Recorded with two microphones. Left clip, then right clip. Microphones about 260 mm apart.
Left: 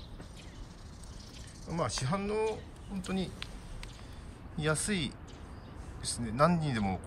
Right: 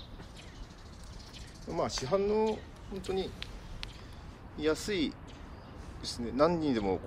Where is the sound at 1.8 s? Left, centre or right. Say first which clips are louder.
Right 4 dB; centre.